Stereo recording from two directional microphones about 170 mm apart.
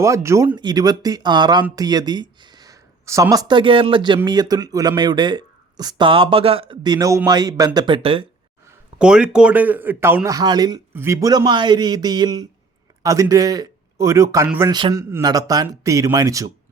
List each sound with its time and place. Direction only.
0.0 s speech: 15° right (ahead or behind)
9.0 s speech: 5° right (ahead or behind)
14.7 s speech: 25° right (ahead or behind)